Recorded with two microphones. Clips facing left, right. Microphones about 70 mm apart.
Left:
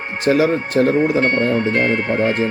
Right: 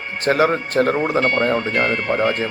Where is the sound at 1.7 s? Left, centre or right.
Left.